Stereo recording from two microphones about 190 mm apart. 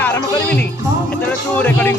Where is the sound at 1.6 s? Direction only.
10° left (ahead or behind).